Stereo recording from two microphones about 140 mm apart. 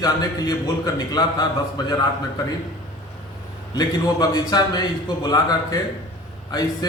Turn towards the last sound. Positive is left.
turn(degrees=30)  # may be behind; listen again after turning